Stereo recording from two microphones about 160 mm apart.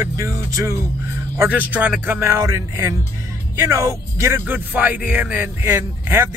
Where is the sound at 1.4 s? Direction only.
10° right (ahead or behind).